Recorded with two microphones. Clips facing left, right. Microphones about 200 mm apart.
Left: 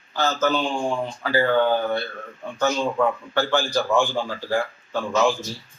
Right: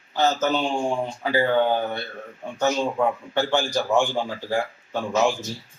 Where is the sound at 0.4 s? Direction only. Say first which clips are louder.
Even; 25° right (ahead or behind).